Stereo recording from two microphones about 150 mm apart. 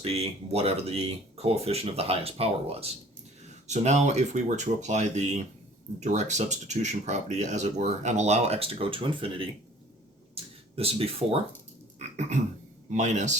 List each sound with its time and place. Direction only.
0.0 s speech: 45° right (ahead or behind)
11.9 s a sound: 50° right (ahead or behind)
12.9 s speech: 55° right (ahead or behind)